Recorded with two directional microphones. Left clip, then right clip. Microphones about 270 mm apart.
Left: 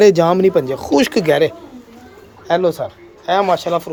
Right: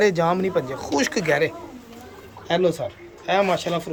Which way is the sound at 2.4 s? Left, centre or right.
Centre.